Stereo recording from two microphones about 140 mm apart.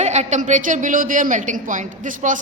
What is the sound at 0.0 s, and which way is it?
A man's voice, 55° right (ahead or behind).